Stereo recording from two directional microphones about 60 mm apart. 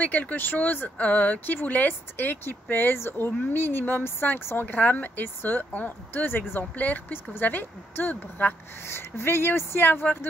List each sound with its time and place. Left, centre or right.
0.0 s a woman's voice: left
8.8 s speech: left